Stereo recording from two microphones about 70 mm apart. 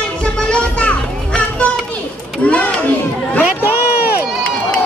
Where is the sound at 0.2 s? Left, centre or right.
Centre.